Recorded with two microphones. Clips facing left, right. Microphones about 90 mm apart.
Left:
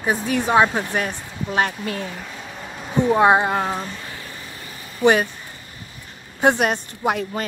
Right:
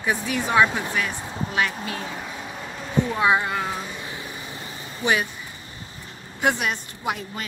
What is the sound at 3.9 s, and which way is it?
Vehicle, 20° right (ahead or behind).